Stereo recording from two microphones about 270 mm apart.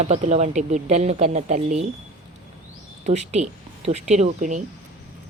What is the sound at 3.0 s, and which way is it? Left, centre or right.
Speech, right.